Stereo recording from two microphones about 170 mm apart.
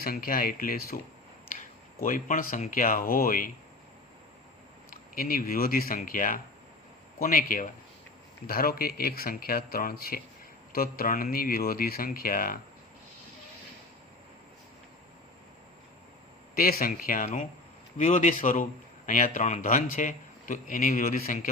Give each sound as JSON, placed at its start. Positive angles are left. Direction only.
{"t": 0.0, "sound": "speech", "side_deg": 60}
{"t": 2.0, "sound": "speech", "side_deg": 55}
{"t": 5.1, "sound": "speech", "side_deg": 60}
{"t": 16.6, "sound": "speech", "side_deg": 55}